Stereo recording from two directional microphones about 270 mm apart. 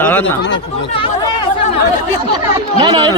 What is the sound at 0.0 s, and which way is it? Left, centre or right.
Speech, centre.